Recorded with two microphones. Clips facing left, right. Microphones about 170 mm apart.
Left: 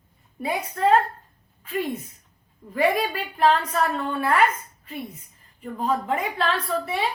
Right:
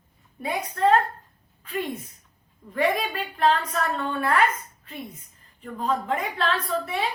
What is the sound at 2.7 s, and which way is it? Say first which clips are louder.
A woman's voice: left 2 dB; 5° left (ahead or behind).